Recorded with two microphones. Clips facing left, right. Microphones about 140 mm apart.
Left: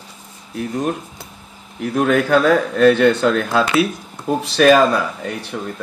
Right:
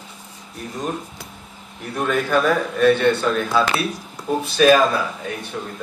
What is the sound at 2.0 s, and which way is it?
Speech, 70° left (ahead or behind).